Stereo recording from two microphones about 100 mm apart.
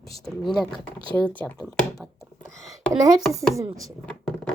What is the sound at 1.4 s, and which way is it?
Speech, 15° left (ahead or behind).